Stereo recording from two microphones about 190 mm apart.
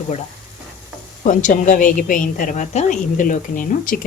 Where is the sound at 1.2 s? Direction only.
45° left (ahead or behind).